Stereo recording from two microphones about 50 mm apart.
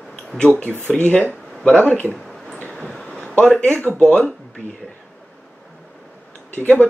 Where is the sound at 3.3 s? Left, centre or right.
Left.